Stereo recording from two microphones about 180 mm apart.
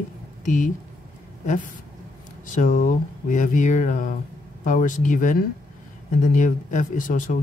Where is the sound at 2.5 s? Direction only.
40° left (ahead or behind).